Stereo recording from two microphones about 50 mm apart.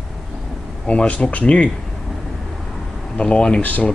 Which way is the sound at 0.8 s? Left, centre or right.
Left.